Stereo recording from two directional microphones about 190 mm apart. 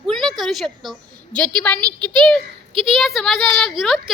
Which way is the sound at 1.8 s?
25° right (ahead or behind).